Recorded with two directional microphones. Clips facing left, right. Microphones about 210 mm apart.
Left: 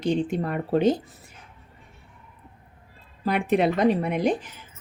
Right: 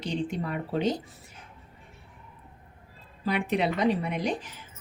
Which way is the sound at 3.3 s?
50° left (ahead or behind).